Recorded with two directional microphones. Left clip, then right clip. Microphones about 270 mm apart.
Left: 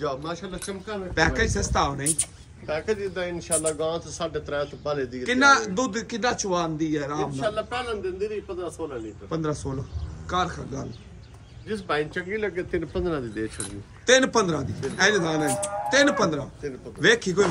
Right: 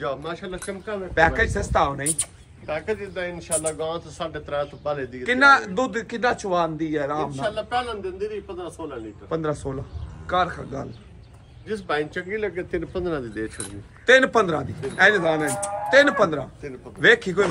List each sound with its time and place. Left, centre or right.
0.0 s a man's voice: centre
2.1 s speech: right
5.2 s a man's voice: centre
7.5 s speech: right
9.3 s a man's voice: centre